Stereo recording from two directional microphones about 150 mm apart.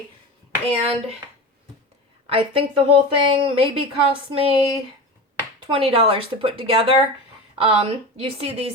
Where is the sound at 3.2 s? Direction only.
35° right (ahead or behind).